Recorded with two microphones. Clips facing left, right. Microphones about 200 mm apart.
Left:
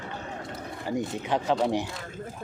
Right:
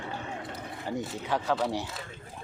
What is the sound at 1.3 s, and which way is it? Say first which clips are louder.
Speech: left 3 dB; 20° left (ahead or behind).